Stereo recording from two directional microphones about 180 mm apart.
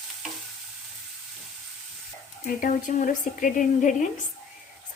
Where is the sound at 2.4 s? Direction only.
50° left (ahead or behind).